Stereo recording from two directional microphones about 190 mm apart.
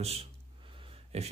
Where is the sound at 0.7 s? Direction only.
30° right (ahead or behind).